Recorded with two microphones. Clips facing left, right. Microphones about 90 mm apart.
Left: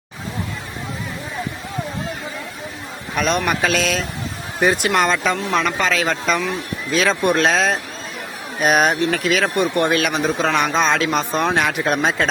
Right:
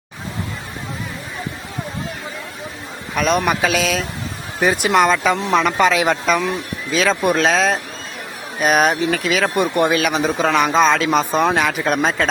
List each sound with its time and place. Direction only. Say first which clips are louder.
3.2 s a man's voice: right 2 dB; centre (ahead or behind)
6.9 s speech: even; centre (ahead or behind)